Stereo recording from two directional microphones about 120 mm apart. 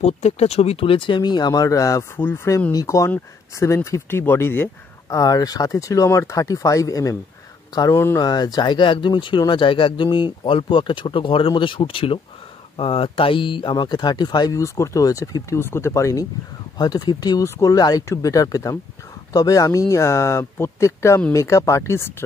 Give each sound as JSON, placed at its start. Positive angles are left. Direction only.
{"t": 0.0, "sound": "speech", "side_deg": 65}
{"t": 5.1, "sound": "speech", "side_deg": 30}
{"t": 8.2, "sound": "speech", "side_deg": 35}